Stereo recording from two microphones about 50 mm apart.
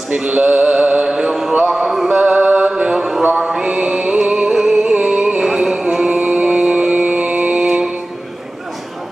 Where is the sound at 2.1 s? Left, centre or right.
Right.